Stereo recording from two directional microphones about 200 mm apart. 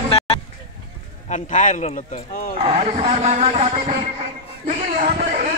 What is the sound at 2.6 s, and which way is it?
Speech, 30° right (ahead or behind).